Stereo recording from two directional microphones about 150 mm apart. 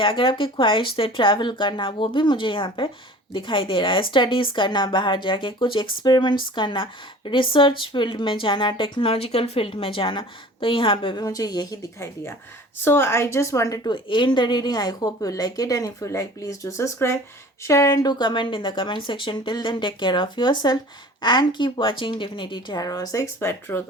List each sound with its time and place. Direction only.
0.0 s a woman's voice: 35° left (ahead or behind); by 23.8 s 15° left (ahead or behind)